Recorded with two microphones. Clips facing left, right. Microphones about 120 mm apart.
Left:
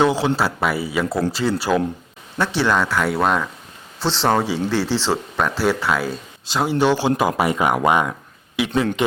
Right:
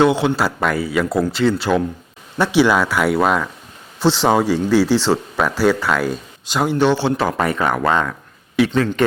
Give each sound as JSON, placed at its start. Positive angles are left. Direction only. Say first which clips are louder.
{"t": 0.0, "sound": "speech", "louder": "right 2 dB", "side_deg": 0}
{"t": 2.4, "sound": "speech", "louder": "right 4 dB", "side_deg": -10}